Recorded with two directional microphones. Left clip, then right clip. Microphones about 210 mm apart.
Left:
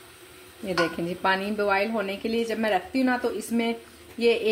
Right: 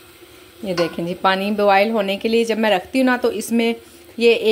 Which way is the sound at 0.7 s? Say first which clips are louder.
Right 5 dB; 25° right (ahead or behind).